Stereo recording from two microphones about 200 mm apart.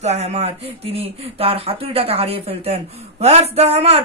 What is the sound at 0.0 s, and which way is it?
Speech, 35° right (ahead or behind).